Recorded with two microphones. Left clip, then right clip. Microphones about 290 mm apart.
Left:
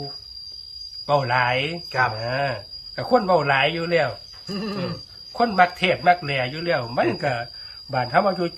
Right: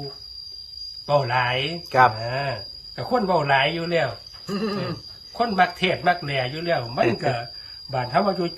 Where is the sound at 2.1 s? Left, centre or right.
Centre.